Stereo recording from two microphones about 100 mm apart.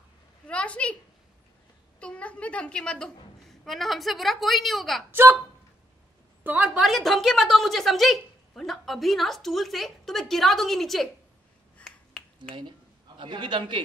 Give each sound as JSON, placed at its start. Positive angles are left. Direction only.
{"t": 0.5, "sound": "a woman's voice", "side_deg": 10}
{"t": 2.0, "sound": "a woman's voice", "side_deg": 10}
{"t": 5.1, "sound": "speech", "side_deg": -20}
{"t": 6.4, "sound": "a woman's voice", "side_deg": -15}
{"t": 6.8, "sound": "a woman's voice", "side_deg": 0}
{"t": 11.8, "sound": "finger snapping", "side_deg": 10}
{"t": 12.4, "sound": "a man's voice", "side_deg": -55}